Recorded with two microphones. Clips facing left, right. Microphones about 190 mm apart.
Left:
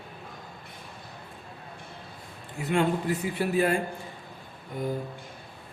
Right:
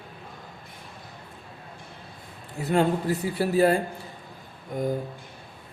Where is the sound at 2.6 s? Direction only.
40° right (ahead or behind).